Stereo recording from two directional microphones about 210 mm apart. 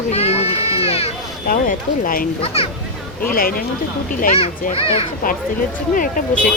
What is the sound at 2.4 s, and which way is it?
Speech, 30° left (ahead or behind).